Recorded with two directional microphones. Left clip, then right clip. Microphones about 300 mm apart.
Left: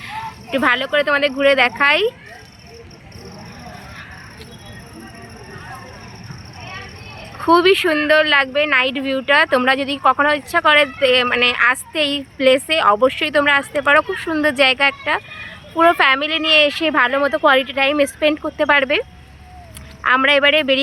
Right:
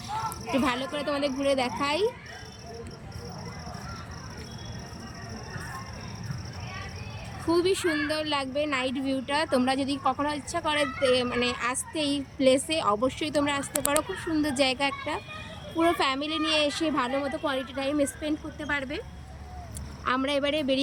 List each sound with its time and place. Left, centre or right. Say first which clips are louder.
0.1 s speech: left 5 dB; centre
7.4 s speech: left 12 dB; centre
8.2 s speech: left 13 dB; centre
16.2 s speech: left 12 dB; centre
16.9 s speech: left 13 dB; centre
20.1 s speech: left 14 dB; centre
20.6 s speech: left 11 dB; centre